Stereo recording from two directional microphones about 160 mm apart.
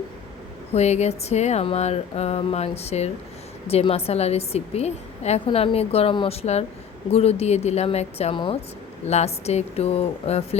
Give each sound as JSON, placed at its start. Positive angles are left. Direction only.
{"t": 0.7, "sound": "speech", "side_deg": 45}